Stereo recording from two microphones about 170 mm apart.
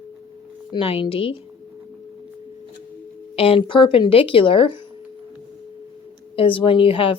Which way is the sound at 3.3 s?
35° left (ahead or behind).